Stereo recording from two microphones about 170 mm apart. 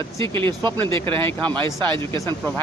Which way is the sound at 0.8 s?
15° left (ahead or behind).